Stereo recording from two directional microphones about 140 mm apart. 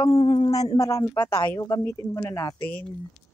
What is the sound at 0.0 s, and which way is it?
Speech, 30° left (ahead or behind).